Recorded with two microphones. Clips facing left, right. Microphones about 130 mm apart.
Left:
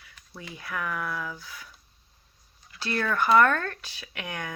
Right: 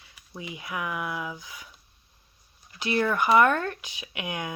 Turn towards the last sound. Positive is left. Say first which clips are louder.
# right 3 dB
turn(degrees=-15)  # may be behind; listen again after turning